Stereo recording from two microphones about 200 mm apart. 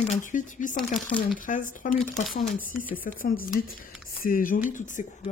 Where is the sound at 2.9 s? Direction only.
45° left (ahead or behind).